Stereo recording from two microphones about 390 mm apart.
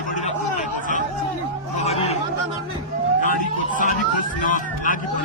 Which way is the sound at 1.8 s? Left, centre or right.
Centre.